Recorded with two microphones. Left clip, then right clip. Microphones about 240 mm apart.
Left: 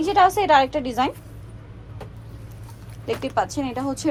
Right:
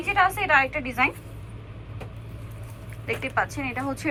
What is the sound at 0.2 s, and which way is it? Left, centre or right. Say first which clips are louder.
Speech: left 5 dB; centre.